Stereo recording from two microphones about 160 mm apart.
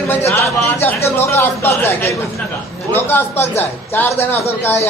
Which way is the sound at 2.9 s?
15° left (ahead or behind).